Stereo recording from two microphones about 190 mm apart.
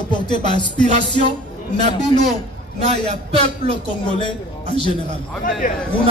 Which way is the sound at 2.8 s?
35° right (ahead or behind).